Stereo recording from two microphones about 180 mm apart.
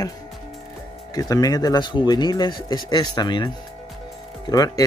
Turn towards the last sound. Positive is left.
turn(degrees=20)  # may be behind; listen again after turning